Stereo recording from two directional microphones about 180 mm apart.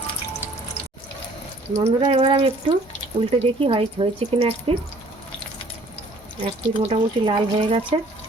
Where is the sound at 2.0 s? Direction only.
30° right (ahead or behind).